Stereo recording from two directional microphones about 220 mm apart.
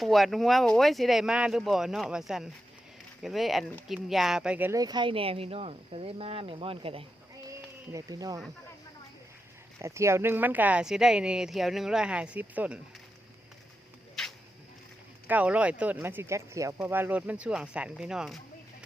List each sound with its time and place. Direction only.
0.0 s speech: centre (ahead or behind); by 7.0 s 25° right (ahead or behind)
7.5 s a sound: 15° right (ahead or behind)
9.8 s speech: 15° right (ahead or behind)
15.3 s speech: 5° right (ahead or behind)